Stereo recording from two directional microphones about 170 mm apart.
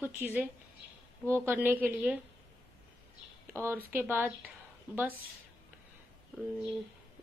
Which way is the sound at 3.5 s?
10° right (ahead or behind).